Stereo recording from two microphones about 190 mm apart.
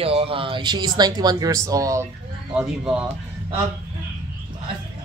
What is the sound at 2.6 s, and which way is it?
Speech, 5° right (ahead or behind).